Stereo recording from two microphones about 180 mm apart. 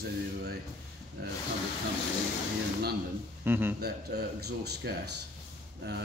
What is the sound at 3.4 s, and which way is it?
Speech, 10° right (ahead or behind).